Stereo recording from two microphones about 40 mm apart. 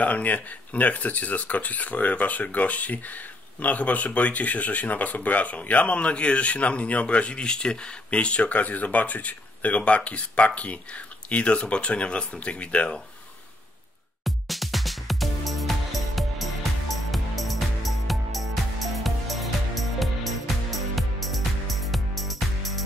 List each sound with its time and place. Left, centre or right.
0.0 s speech: left
8.5 s speech: left
14.2 s music: centre